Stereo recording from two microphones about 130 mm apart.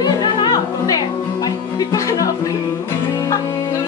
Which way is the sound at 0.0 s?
30° left (ahead or behind).